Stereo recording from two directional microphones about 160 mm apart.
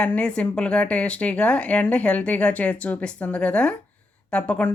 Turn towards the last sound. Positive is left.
turn(degrees=5)  # may be behind; listen again after turning